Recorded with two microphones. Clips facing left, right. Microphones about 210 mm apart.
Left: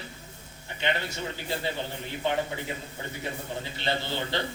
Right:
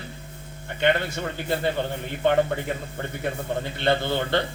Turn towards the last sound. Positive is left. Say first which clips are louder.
# right 7 dB
turn(degrees=-55)  # may be behind; listen again after turning